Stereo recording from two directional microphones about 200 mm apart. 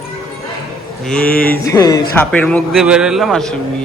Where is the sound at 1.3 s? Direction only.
45° left (ahead or behind).